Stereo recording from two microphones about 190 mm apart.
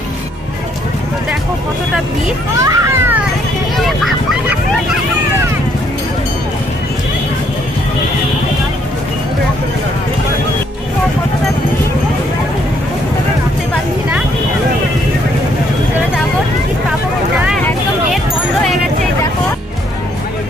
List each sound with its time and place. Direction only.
2.6 s children playing: 15° right (ahead or behind)
3.7 s speech: centre (ahead or behind)